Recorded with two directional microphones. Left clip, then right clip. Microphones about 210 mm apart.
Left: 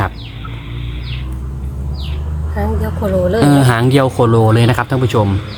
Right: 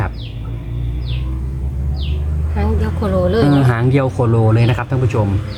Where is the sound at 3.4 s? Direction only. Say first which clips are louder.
Left 4 dB; 35° left (ahead or behind).